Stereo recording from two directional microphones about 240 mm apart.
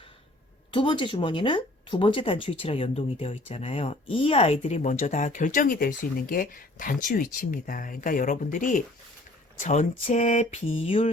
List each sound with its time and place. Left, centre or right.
0.7 s speech: centre